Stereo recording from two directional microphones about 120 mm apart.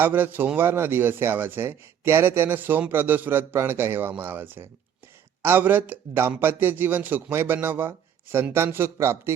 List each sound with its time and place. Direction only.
0.0 s a man's voice: 15° right (ahead or behind)